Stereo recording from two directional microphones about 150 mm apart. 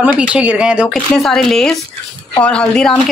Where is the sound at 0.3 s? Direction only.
10° right (ahead or behind).